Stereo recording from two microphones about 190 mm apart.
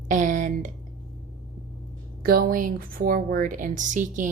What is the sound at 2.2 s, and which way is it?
Speech, 50° right (ahead or behind).